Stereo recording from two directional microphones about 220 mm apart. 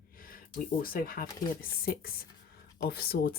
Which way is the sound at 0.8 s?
40° left (ahead or behind).